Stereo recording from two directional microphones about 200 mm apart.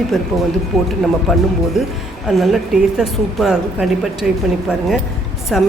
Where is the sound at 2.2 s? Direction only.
Centre (ahead or behind).